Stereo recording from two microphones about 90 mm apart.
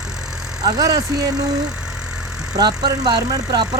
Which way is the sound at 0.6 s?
45° right (ahead or behind).